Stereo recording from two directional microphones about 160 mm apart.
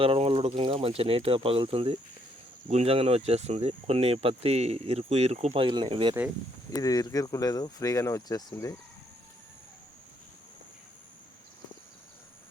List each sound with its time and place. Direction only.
0.0 s speech: 40° right (ahead or behind)
6.7 s speech: 20° left (ahead or behind)